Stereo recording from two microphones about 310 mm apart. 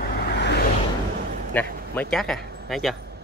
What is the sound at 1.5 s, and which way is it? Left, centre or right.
Speech, centre.